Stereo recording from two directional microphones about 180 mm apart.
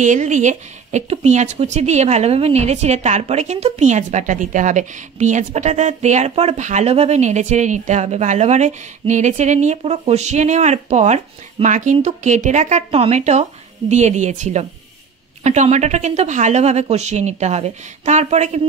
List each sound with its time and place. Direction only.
0.0 s speech: 45° right (ahead or behind)